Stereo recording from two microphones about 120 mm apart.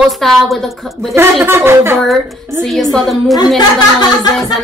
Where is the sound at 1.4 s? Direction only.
20° right (ahead or behind).